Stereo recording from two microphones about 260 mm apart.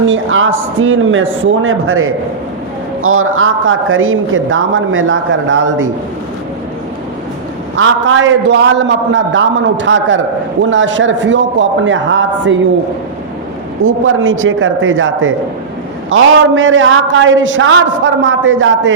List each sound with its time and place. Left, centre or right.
0.1 s a man's voice: right
7.8 s a man's voice: right
13.8 s a man's voice: right